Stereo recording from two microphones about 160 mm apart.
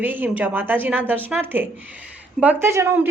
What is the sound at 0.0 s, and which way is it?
A woman's voice, 10° right (ahead or behind).